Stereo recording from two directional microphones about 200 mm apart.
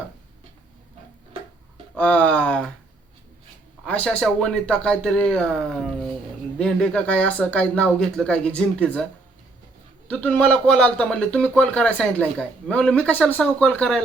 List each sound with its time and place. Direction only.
2.0 s speech: 5° left (ahead or behind)
3.8 s speech: 5° left (ahead or behind)
10.1 s speech: 5° left (ahead or behind)